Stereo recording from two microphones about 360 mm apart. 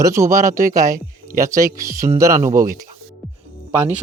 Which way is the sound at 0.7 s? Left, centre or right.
Centre.